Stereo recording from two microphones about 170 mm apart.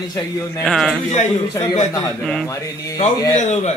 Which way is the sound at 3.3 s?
45° left (ahead or behind).